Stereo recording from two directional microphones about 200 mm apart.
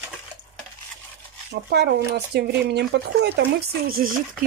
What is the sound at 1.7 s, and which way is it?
Speech, 60° right (ahead or behind).